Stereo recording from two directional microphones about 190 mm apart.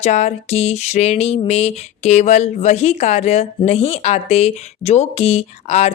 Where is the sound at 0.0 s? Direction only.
35° left (ahead or behind).